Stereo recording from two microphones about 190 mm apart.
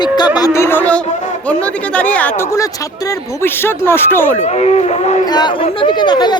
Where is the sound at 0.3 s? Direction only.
15° left (ahead or behind).